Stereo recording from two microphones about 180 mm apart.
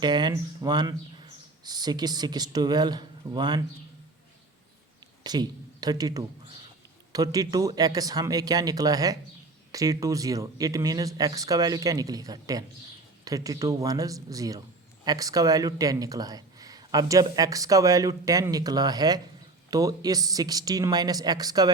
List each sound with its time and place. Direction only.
0.0 s speech: 25° right (ahead or behind)
5.2 s speech: 20° right (ahead or behind)